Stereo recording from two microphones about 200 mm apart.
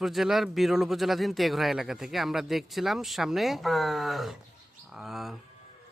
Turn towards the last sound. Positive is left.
turn(degrees=0)  # may be behind; listen again after turning